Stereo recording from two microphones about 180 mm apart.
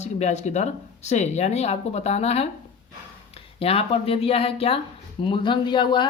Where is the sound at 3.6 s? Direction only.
30° left (ahead or behind).